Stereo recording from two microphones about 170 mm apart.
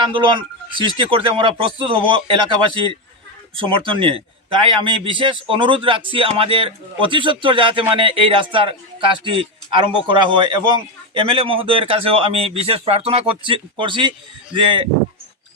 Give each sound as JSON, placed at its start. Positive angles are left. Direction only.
{"t": 0.1, "sound": "a man's voice", "side_deg": -30}